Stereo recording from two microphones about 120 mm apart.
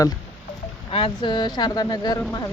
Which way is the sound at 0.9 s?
45° left (ahead or behind).